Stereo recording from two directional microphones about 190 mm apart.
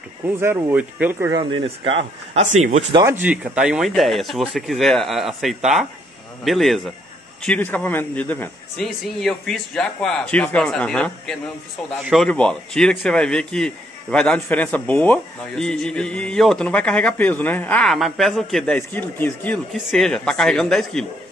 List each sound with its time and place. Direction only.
0.4 s speech: 10° right (ahead or behind)
1.3 s a man's voice: 25° right (ahead or behind)
2.9 s speech: 20° right (ahead or behind)
3.2 s a man's voice: 5° right (ahead or behind)